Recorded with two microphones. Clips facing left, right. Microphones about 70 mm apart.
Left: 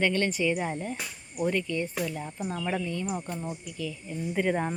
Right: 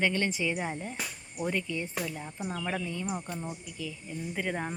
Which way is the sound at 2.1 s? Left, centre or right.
Centre.